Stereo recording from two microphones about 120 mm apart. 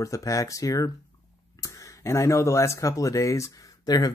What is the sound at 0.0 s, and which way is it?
Speech, 25° left (ahead or behind).